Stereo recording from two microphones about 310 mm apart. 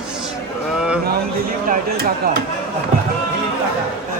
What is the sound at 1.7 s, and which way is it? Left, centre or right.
Speech, right.